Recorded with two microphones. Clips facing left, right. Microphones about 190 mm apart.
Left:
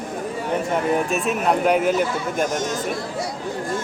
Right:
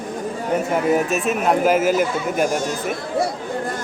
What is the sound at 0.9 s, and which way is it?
A man's voice, centre (ahead or behind).